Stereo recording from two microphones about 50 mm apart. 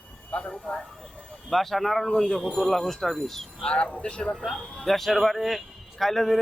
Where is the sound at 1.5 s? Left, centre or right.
Centre.